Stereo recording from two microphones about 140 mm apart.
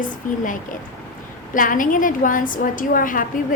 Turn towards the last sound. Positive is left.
turn(degrees=75)  # may be behind; listen again after turning